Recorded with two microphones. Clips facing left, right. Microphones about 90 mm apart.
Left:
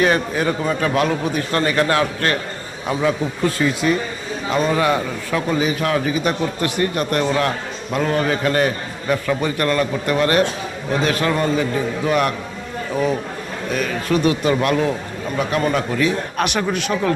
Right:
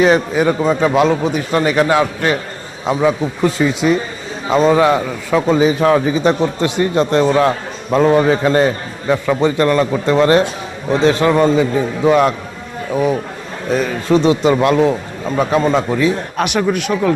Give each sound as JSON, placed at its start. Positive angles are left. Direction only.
{"t": 0.0, "sound": "a man's voice", "side_deg": -15}
{"t": 13.7, "sound": "a man's voice", "side_deg": -30}
{"t": 16.6, "sound": "speech", "side_deg": 0}